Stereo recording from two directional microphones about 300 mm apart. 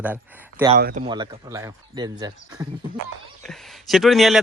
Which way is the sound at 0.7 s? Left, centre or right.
Right.